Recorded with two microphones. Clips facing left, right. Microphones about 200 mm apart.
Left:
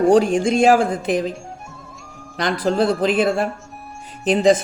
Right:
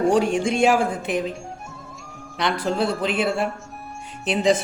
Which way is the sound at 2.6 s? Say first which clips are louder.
Left 7 dB; 40° left (ahead or behind).